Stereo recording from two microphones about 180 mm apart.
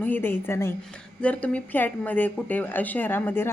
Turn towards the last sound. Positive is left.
turn(degrees=10)  # may be behind; listen again after turning